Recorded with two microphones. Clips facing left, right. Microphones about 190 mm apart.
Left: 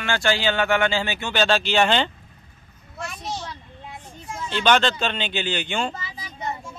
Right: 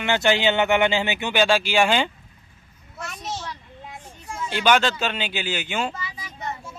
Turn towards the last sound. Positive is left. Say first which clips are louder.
# left 1 dB
turn(degrees=30)  # may be behind; listen again after turning